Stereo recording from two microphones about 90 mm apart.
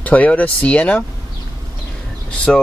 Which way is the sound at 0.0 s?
15° left (ahead or behind).